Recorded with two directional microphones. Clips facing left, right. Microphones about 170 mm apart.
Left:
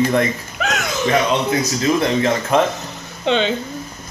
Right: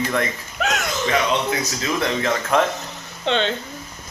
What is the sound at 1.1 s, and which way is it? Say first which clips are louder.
Speech: left 4 dB; 35° left (ahead or behind).